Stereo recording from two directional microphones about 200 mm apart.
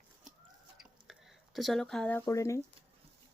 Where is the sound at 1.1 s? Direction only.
Centre (ahead or behind).